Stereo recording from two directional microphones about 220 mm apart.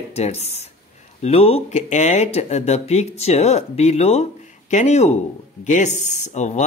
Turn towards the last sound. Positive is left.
turn(degrees=30)  # may be behind; listen again after turning